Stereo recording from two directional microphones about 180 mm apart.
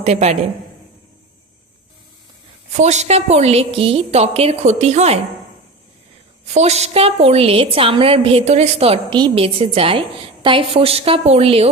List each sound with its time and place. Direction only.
0.0 s a woman's voice: 35° right (ahead or behind)
2.7 s a woman's voice: 40° right (ahead or behind)
6.5 s a woman's voice: 35° right (ahead or behind)